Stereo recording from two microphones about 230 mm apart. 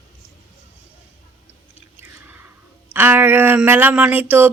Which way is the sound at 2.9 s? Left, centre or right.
Centre.